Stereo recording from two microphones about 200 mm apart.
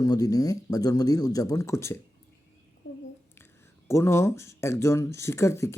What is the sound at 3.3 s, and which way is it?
Speech, 10° left (ahead or behind).